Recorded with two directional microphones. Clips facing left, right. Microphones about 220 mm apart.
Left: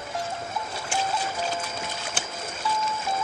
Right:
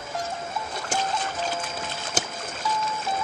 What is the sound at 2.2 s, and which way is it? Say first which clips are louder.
Boat: right 5 dB; 40° right (ahead or behind).